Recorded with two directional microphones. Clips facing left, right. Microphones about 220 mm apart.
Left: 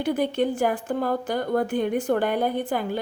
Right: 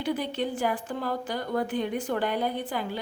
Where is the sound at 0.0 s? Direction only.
50° left (ahead or behind).